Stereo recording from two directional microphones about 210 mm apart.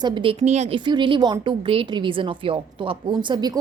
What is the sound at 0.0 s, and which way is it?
A woman's voice, 25° right (ahead or behind).